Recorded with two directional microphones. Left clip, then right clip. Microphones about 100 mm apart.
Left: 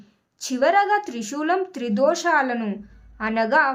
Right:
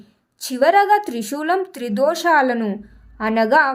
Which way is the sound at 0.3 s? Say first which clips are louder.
Right 4 dB; 35° right (ahead or behind).